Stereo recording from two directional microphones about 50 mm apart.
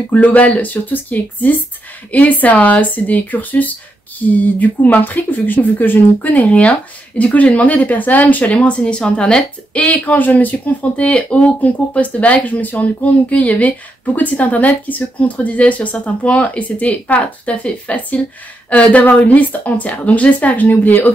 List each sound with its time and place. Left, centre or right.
0.1 s speech: left